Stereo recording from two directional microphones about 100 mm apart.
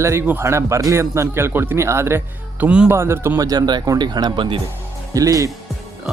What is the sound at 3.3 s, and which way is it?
Speech, 40° right (ahead or behind).